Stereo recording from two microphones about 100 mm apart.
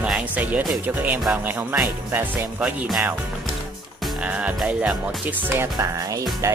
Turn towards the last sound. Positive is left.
turn(degrees=-30)  # may be behind; listen again after turning